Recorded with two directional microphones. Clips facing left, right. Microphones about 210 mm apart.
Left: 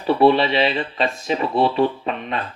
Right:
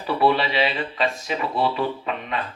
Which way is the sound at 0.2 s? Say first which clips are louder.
Left 4 dB; 30° left (ahead or behind).